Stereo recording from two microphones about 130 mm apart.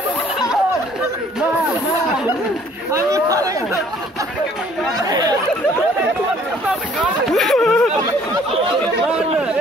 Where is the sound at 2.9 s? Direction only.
25° right (ahead or behind).